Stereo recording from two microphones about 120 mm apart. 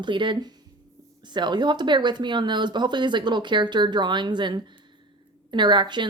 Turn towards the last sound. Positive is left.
turn(degrees=-40)  # may be behind; listen again after turning